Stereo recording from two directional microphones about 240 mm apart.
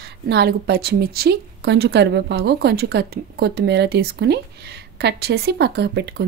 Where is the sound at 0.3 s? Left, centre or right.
Right.